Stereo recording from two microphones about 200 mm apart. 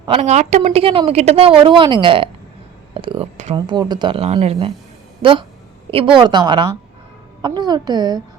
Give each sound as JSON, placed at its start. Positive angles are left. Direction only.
{"t": 0.1, "sound": "a woman's voice", "side_deg": -35}
{"t": 2.9, "sound": "a sound", "side_deg": -25}
{"t": 3.5, "sound": "speech", "side_deg": -20}